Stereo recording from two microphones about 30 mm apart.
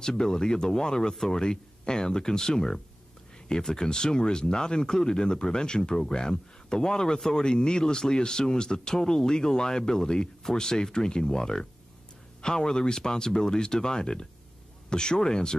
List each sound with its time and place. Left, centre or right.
0.0 s speech: left